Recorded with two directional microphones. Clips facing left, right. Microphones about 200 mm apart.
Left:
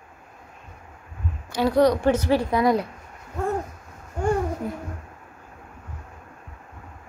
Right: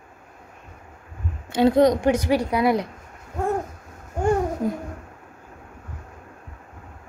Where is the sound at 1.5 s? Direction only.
20° right (ahead or behind).